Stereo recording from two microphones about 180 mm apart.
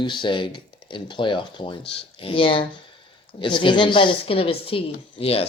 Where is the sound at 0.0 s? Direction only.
25° left (ahead or behind).